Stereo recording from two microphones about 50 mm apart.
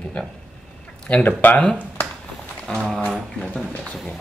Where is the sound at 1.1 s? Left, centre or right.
Left.